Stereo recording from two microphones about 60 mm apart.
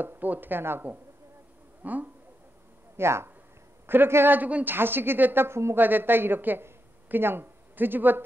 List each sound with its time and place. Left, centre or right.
0.0 s a woman's voice: right
1.8 s speech: right
3.0 s a woman's voice: right
4.6 s a woman's voice: right
5.8 s a woman's voice: right